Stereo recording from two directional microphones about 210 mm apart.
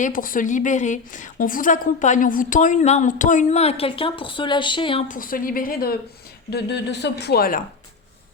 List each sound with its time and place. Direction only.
0.0 s speech: 40° left (ahead or behind); by 5.0 s 25° left (ahead or behind)
5.0 s speech: 40° left (ahead or behind)